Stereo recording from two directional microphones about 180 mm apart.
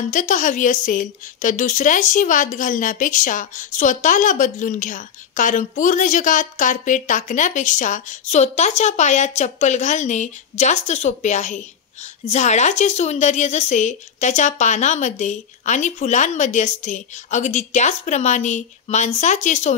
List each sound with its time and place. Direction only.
0.1 s a woman's voice: 45° left (ahead or behind)